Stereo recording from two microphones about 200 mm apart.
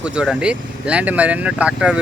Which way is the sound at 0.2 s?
5° right (ahead or behind).